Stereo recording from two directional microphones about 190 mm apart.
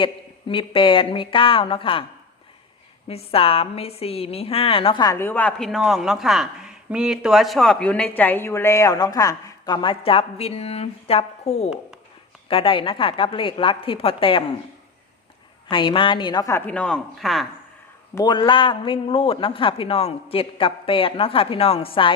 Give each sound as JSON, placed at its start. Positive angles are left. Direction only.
{"t": 0.0, "sound": "a woman's voice", "side_deg": 25}
{"t": 3.1, "sound": "a woman's voice", "side_deg": 30}
{"t": 15.7, "sound": "speech", "side_deg": 25}
{"t": 18.1, "sound": "a woman's voice", "side_deg": 20}